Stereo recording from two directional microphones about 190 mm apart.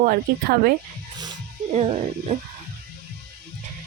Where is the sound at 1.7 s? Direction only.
35° right (ahead or behind).